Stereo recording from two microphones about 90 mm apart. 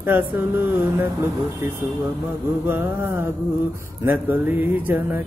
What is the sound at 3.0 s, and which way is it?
Speech, 25° right (ahead or behind).